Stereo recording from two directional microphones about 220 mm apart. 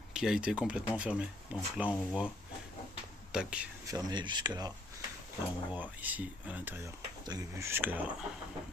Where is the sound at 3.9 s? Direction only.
20° right (ahead or behind).